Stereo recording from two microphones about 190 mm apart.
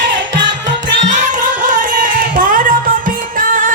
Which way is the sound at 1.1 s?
40° right (ahead or behind).